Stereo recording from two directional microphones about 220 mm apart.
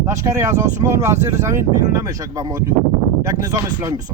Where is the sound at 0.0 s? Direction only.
15° right (ahead or behind).